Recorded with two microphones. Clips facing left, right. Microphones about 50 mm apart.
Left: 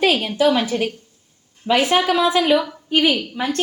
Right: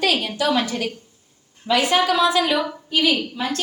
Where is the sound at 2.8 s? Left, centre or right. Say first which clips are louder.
Left 2 dB; left.